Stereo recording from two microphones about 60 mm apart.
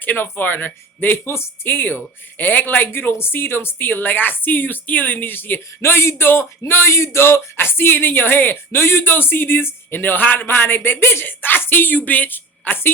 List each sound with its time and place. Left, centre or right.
0.0 s speech: left